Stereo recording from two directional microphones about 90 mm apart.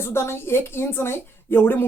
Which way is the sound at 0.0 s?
30° left (ahead or behind).